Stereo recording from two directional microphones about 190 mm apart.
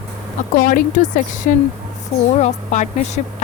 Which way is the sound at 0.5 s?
45° left (ahead or behind).